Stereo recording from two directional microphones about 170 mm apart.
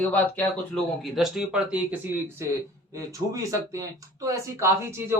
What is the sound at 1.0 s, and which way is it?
Speech, centre (ahead or behind).